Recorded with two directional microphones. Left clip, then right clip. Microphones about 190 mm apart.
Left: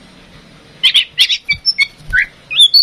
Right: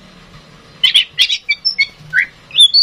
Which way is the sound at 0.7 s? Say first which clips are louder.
Left 1 dB; 20° left (ahead or behind).